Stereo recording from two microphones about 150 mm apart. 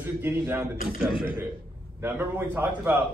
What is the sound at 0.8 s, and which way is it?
Speech, 5° right (ahead or behind).